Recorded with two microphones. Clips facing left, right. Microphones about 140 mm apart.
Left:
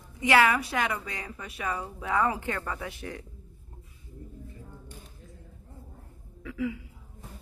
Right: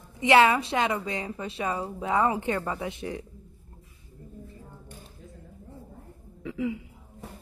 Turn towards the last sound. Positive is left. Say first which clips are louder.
# right 2 dB
turn(degrees=-25)  # may be behind; listen again after turning